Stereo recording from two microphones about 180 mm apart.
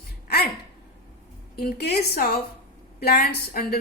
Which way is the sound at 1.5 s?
60° left (ahead or behind).